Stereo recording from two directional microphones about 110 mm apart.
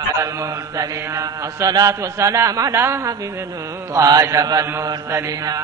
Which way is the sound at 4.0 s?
30° right (ahead or behind).